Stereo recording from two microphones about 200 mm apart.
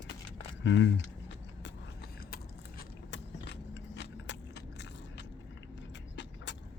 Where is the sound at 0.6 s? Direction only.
65° left (ahead or behind).